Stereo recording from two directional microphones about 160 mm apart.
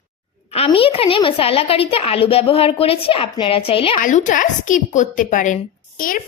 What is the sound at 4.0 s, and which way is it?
A woman's voice, 50° left (ahead or behind).